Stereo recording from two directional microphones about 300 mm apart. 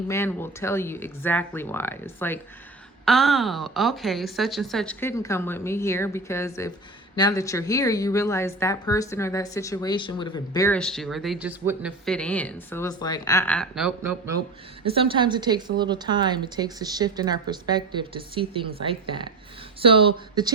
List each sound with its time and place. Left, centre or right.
0.1 s a woman's voice: centre
14.8 s speech: centre